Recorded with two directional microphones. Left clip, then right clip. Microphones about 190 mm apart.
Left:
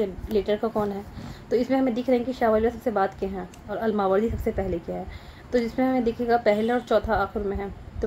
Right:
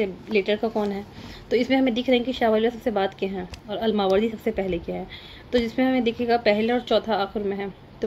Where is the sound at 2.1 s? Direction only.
30° right (ahead or behind).